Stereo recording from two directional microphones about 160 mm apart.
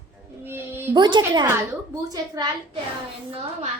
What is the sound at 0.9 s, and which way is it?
A child's voice, 30° right (ahead or behind).